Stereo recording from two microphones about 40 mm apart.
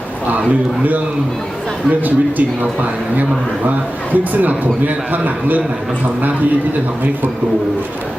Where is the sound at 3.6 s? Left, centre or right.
Right.